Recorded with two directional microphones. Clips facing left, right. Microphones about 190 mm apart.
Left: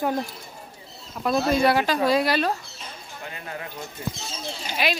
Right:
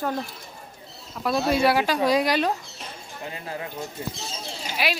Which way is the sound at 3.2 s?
25° right (ahead or behind).